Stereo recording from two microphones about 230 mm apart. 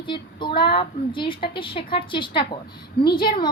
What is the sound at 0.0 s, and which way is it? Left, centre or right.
A woman's voice, left.